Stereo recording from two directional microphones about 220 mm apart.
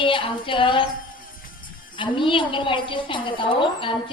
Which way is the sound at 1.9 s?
20° left (ahead or behind).